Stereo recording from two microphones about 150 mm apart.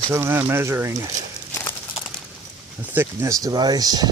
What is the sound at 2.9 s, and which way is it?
Speech, 15° right (ahead or behind).